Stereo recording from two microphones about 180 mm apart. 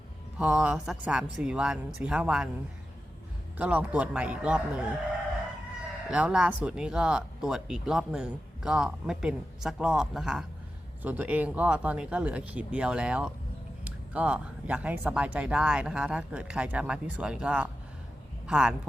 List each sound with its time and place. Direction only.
0.3 s speech: 5° right (ahead or behind)
3.6 s speech: 10° right (ahead or behind)
6.1 s speech: 5° right (ahead or behind)